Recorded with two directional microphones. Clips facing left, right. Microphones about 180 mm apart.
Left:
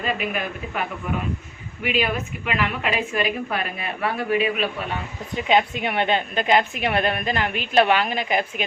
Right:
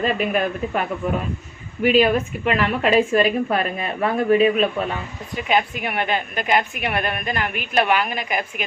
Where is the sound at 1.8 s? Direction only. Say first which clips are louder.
Right 8 dB; 40° right (ahead or behind).